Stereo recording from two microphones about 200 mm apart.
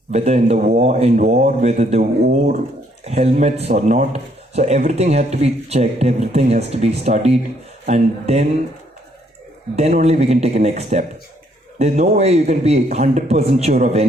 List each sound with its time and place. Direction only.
0.1 s speech: 30° right (ahead or behind)
9.7 s speech: 35° right (ahead or behind)